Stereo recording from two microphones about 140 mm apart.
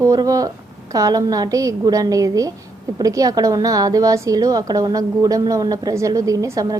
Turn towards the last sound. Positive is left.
turn(degrees=-25)  # may be behind; listen again after turning